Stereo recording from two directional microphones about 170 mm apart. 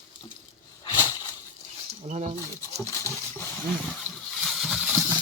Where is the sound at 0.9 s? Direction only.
25° left (ahead or behind).